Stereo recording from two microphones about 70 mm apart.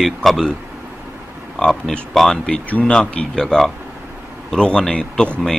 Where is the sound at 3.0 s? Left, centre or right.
Centre.